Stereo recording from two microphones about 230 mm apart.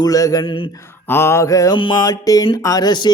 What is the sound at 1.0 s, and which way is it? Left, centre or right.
Mantra, centre.